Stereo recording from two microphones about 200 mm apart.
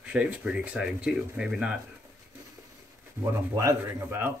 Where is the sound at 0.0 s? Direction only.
5° right (ahead or behind).